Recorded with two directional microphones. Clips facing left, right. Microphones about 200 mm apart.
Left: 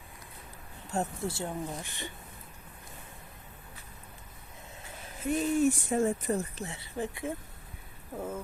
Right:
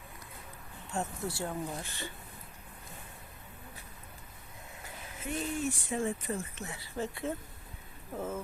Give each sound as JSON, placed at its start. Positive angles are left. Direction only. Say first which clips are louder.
{"t": 0.9, "sound": "speech", "louder": "left 3 dB", "side_deg": 35}
{"t": 1.3, "sound": "speech", "louder": "left 1 dB", "side_deg": 20}
{"t": 5.2, "sound": "speech", "louder": "left 8 dB", "side_deg": 45}
{"t": 6.7, "sound": "speech", "louder": "left 1 dB", "side_deg": 25}